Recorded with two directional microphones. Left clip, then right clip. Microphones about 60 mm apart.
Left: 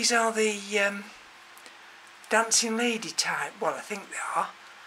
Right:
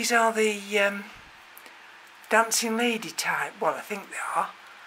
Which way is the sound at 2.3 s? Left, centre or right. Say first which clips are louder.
Right 2 dB; right.